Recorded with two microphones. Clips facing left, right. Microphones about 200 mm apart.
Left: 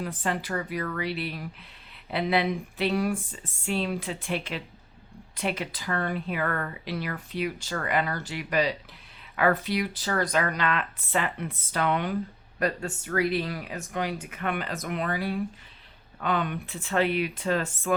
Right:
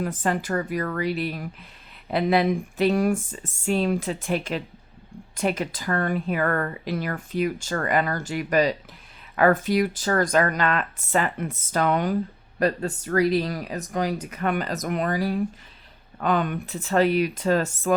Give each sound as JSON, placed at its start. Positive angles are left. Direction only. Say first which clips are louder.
{"t": 0.0, "sound": "speech", "louder": "right 5 dB", "side_deg": -45}